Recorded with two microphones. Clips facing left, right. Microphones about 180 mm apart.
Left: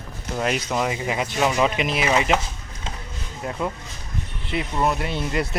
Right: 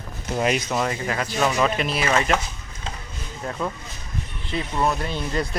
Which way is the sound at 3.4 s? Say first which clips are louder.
Left 1 dB; 15° left (ahead or behind).